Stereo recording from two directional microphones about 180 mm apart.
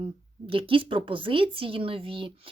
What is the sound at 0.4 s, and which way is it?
Speech, 30° right (ahead or behind).